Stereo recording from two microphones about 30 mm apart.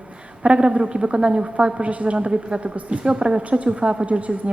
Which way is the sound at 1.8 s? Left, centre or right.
Right.